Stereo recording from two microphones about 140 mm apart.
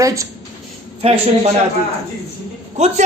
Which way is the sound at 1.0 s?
45° right (ahead or behind).